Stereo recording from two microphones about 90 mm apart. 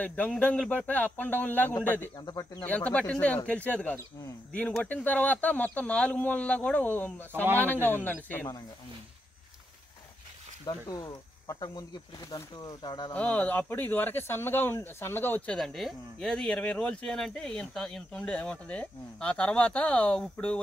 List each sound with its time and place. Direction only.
0.0 s speech: 15° left (ahead or behind)
2.1 s speech: 50° left (ahead or behind)
2.6 s speech: 15° left (ahead or behind)
10.6 s speech: 50° left (ahead or behind)
13.1 s speech: 15° left (ahead or behind)
15.4 s speech: 5° left (ahead or behind)